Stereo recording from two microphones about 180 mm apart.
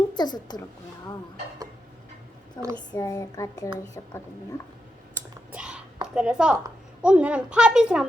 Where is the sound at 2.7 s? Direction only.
20° left (ahead or behind).